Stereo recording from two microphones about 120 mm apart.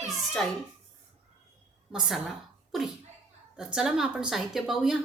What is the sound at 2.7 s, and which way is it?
A woman's voice, centre (ahead or behind).